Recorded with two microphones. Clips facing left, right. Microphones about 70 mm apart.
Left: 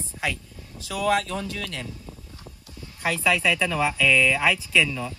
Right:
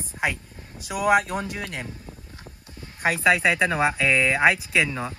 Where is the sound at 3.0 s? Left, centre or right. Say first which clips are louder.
Right 3 dB; right.